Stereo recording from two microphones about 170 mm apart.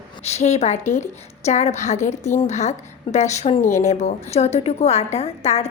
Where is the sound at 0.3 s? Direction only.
40° left (ahead or behind).